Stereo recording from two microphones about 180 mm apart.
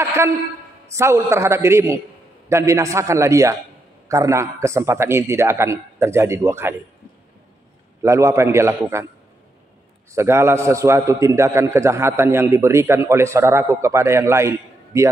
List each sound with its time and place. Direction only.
0.9 s a man's voice: 15° right (ahead or behind)
8.0 s a man's voice: 15° right (ahead or behind)
10.1 s a man's voice: 15° right (ahead or behind)